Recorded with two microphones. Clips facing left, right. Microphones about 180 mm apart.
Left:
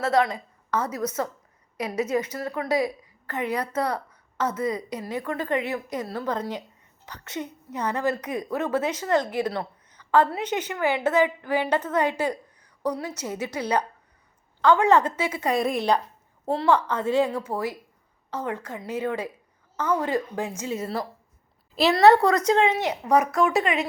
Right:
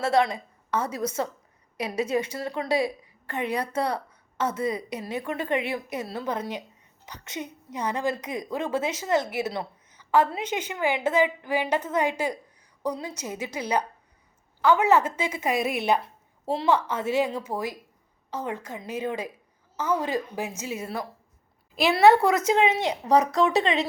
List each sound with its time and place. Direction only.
0.0 s a woman's voice: 25° right (ahead or behind)
3.8 s a sound: 30° right (ahead or behind)
4.9 s a woman's voice: 25° right (ahead or behind)
5.7 s a woman's voice: 10° right (ahead or behind)
15.5 s a woman's voice: 5° right (ahead or behind)
16.5 s a woman's voice: 20° right (ahead or behind)
17.0 s a woman's voice: 10° right (ahead or behind)